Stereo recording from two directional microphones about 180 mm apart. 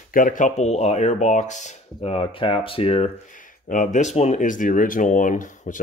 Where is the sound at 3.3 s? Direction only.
45° left (ahead or behind).